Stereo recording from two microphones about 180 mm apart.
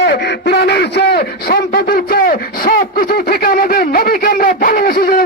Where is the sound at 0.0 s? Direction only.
70° left (ahead or behind).